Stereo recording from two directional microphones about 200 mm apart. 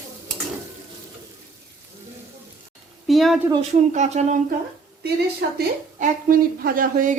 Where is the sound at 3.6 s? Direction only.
35° right (ahead or behind).